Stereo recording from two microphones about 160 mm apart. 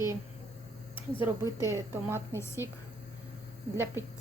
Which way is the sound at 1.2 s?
15° right (ahead or behind).